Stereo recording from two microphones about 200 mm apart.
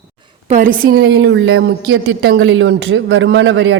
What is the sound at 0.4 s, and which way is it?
A woman's voice, 40° right (ahead or behind).